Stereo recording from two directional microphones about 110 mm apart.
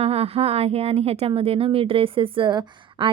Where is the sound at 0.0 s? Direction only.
65° right (ahead or behind).